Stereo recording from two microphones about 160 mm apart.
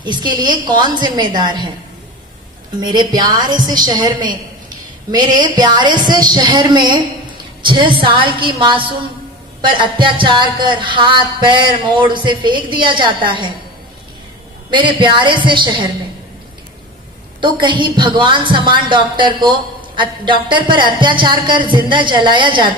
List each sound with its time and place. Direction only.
0.0 s a woman's voice: 30° right (ahead or behind)
2.8 s a woman's voice: 25° right (ahead or behind)
14.7 s a woman's voice: 30° right (ahead or behind)
17.4 s a woman's voice: 30° right (ahead or behind)